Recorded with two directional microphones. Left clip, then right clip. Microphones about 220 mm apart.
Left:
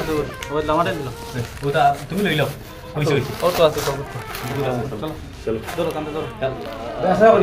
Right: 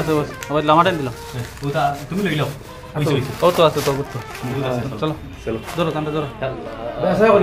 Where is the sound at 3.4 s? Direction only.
55° right (ahead or behind).